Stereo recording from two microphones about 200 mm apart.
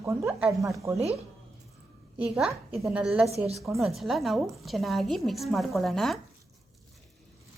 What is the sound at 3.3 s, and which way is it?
Speech, 30° right (ahead or behind).